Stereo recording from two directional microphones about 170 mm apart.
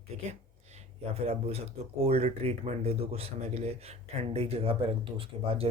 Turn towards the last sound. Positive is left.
turn(degrees=-35)  # may be behind; listen again after turning